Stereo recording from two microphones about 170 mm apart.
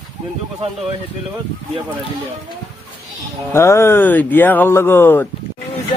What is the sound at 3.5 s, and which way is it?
Speech, 15° left (ahead or behind).